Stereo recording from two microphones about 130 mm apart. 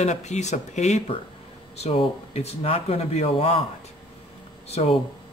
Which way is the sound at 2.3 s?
50° left (ahead or behind).